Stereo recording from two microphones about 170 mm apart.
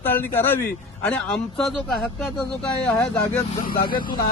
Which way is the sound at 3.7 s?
60° left (ahead or behind).